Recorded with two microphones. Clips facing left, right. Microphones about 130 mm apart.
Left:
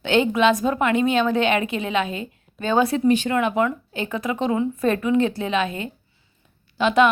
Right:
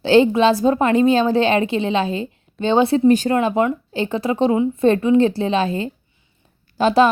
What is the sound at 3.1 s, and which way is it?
A woman's voice, 40° right (ahead or behind).